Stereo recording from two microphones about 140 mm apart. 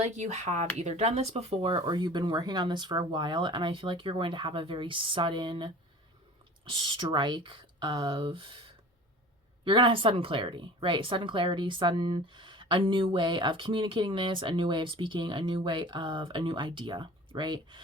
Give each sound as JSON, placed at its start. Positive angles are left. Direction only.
{"t": 0.0, "sound": "speech", "side_deg": -55}